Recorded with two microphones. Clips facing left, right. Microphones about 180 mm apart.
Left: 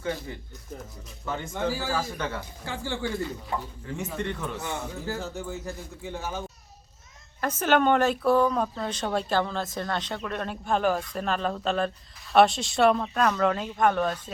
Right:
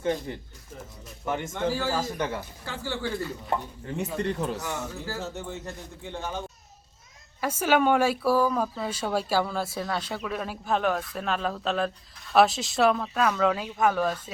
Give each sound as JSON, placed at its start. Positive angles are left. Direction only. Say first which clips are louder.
{"t": 1.2, "sound": "speech", "louder": "right 1 dB", "side_deg": -15}
{"t": 2.6, "sound": "speech", "louder": "left 1 dB", "side_deg": 15}
{"t": 3.8, "sound": "a man's voice", "louder": "right 4 dB", "side_deg": -35}
{"t": 4.6, "sound": "speech", "louder": "left 1 dB", "side_deg": 20}
{"t": 5.1, "sound": "speech", "louder": "left 1 dB", "side_deg": 0}
{"t": 7.4, "sound": "speech", "louder": "even", "side_deg": -10}